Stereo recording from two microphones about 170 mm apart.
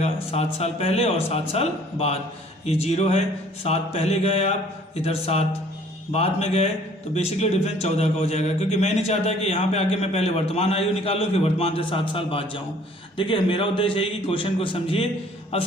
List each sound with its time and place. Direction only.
0.0 s a man's voice: 40° left (ahead or behind)